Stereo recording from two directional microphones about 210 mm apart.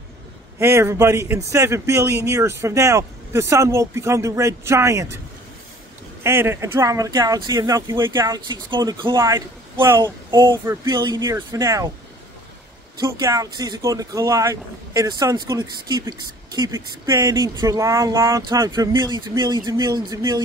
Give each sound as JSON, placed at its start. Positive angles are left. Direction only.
{"t": 0.6, "sound": "speech", "side_deg": -10}
{"t": 6.2, "sound": "speech", "side_deg": -10}
{"t": 13.0, "sound": "speech", "side_deg": -15}